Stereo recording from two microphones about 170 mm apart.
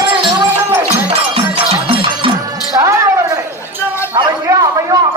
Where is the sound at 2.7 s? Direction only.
20° right (ahead or behind).